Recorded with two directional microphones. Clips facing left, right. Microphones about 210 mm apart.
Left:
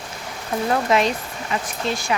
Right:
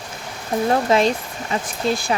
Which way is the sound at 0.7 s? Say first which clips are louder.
Right 2 dB; 30° right (ahead or behind).